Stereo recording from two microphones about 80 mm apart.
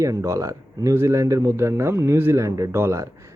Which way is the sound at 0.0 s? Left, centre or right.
Right.